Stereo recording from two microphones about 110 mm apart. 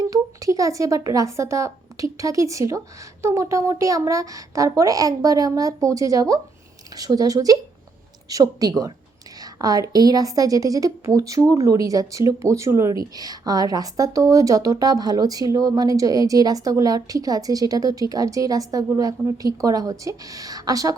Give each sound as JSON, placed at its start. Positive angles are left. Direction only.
{"t": 0.0, "sound": "a woman's voice", "side_deg": -30}